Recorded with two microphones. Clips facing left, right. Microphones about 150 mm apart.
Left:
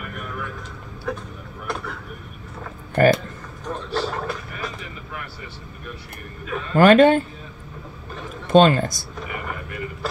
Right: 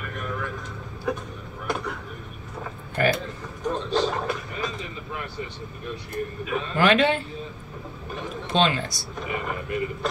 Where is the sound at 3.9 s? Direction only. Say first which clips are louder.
Right 1 dB; 15° right (ahead or behind).